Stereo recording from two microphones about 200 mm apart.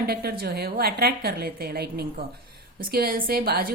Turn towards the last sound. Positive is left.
turn(degrees=-45)  # may be behind; listen again after turning